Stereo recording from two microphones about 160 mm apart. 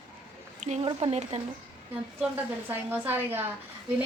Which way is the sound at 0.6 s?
40° right (ahead or behind).